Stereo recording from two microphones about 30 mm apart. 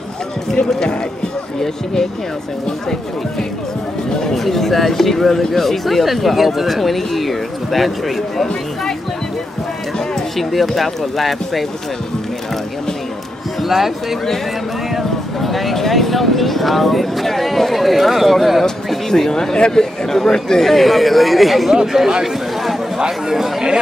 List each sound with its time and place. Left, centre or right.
4.4 s speech: centre
10.3 s speech: centre
13.6 s speech: centre
15.4 s speech: centre
20.6 s speech: centre
22.2 s a sound: centre
22.9 s speech: centre